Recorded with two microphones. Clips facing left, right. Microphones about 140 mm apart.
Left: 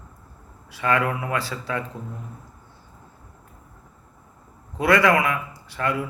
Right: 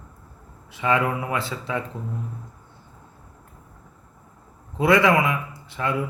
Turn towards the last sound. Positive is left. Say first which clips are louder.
# left 1 dB
turn(degrees=-20)  # may be behind; listen again after turning